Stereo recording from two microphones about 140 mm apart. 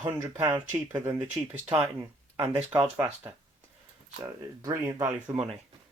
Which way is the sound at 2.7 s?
25° right (ahead or behind).